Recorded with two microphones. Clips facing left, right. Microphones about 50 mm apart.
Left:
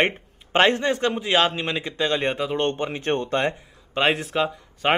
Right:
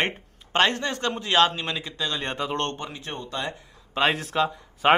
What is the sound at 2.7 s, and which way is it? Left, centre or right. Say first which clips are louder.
Speech: left 7 dB; left.